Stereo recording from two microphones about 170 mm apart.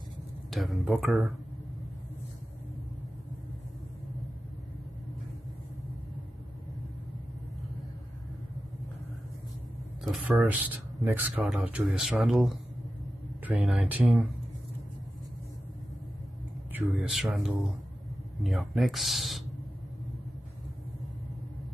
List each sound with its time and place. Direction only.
0.5 s speech: centre (ahead or behind)
10.2 s speech: 10° right (ahead or behind)
13.6 s speech: 10° right (ahead or behind)
16.7 s speech: 5° right (ahead or behind)